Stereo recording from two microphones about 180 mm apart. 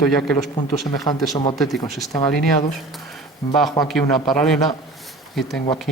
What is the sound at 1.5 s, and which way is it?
Speech, centre (ahead or behind).